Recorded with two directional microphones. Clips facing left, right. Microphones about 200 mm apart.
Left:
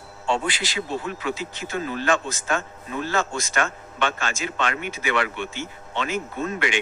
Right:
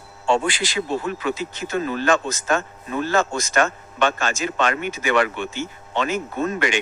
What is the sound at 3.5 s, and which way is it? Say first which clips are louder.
Speech: right 5 dB; 45° right (ahead or behind).